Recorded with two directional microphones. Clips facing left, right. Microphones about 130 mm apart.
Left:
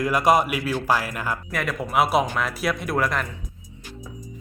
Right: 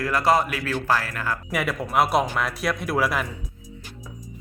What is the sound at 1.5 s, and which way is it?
Speech, 5° right (ahead or behind).